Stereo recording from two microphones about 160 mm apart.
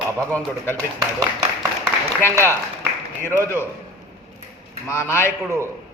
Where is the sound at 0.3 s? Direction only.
10° left (ahead or behind).